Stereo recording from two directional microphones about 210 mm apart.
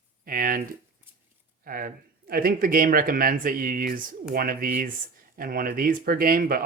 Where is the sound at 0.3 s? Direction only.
40° right (ahead or behind).